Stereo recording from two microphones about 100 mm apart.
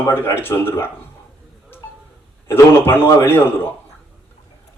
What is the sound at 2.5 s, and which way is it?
A man's voice, 20° left (ahead or behind).